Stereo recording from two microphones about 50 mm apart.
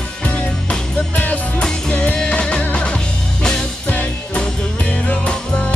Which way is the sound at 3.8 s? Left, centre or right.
Left.